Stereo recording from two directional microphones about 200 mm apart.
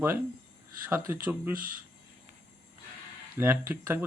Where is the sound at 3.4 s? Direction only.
10° right (ahead or behind).